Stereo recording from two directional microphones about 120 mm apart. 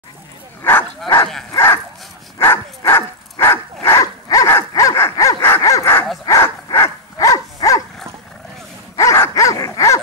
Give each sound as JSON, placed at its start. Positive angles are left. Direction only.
{"t": 0.6, "sound": "speech", "side_deg": 15}
{"t": 1.5, "sound": "dog", "side_deg": 20}
{"t": 8.9, "sound": "dog", "side_deg": 25}